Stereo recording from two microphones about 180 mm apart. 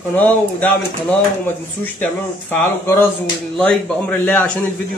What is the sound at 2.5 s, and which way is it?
Speech, 10° left (ahead or behind).